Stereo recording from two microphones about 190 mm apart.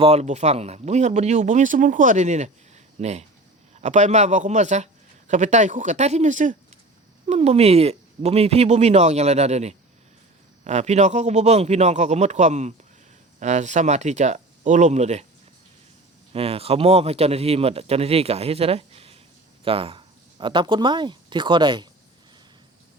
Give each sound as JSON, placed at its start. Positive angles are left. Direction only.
{"t": 0.0, "sound": "speech", "side_deg": -35}
{"t": 16.3, "sound": "speech", "side_deg": -30}